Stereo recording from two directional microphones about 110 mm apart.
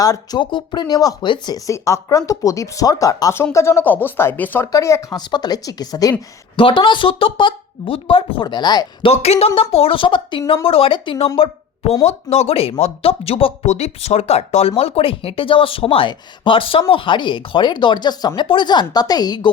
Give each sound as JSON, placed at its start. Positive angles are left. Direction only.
{"t": 0.0, "sound": "speech", "side_deg": 35}
{"t": 1.5, "sound": "speech", "side_deg": 30}
{"t": 4.6, "sound": "speech", "side_deg": 30}
{"t": 6.6, "sound": "speech", "side_deg": 50}
{"t": 8.4, "sound": "speech", "side_deg": 40}
{"t": 9.0, "sound": "speech", "side_deg": 70}
{"t": 9.6, "sound": "speech", "side_deg": 55}
{"t": 12.0, "sound": "speech", "side_deg": 70}